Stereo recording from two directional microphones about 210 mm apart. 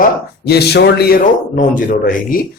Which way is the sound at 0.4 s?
50° left (ahead or behind).